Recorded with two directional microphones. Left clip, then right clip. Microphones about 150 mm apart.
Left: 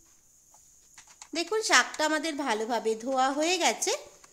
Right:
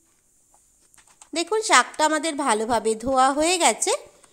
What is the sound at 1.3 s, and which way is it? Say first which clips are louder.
A woman's voice: right 5 dB; 35° right (ahead or behind).